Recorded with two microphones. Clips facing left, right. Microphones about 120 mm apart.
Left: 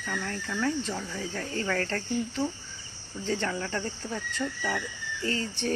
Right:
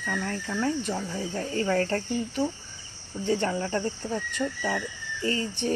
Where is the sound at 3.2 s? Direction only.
20° right (ahead or behind).